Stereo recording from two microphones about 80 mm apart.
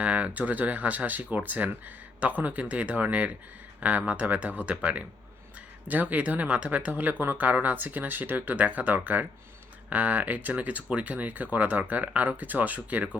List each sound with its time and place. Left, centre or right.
0.0 s speech: centre